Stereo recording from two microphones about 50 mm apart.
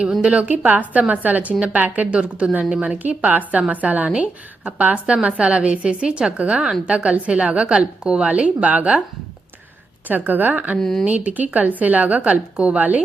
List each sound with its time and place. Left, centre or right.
0.2 s a woman's voice: right
10.1 s speech: right
10.8 s speech: centre
11.0 s speech: right